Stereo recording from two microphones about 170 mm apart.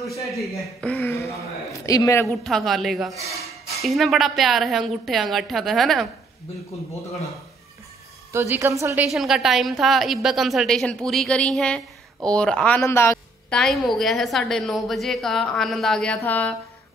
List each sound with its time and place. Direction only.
0.3 s a man's voice: centre (ahead or behind); by 2.2 s 20° left (ahead or behind)
2.4 s a woman's voice: centre (ahead or behind)
8.3 s a woman's voice: 15° right (ahead or behind)
9.1 s a woman's voice: centre (ahead or behind); by 13.1 s 15° left (ahead or behind)
13.5 s a woman's voice: centre (ahead or behind)